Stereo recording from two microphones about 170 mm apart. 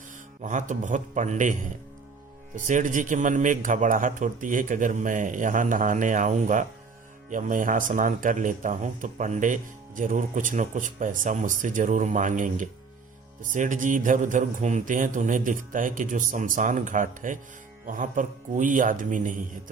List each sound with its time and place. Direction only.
0.4 s speech: 50° right (ahead or behind)
2.6 s speech: 50° right (ahead or behind)